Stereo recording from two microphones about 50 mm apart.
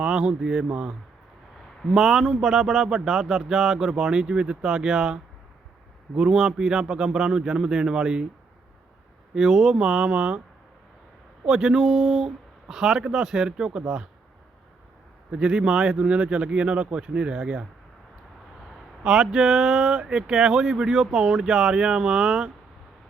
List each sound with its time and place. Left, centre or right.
0.0 s speech: centre
1.8 s speech: centre
9.3 s speech: centre
9.8 s speech: right
11.4 s speech: centre
15.3 s speech: centre
19.0 s speech: centre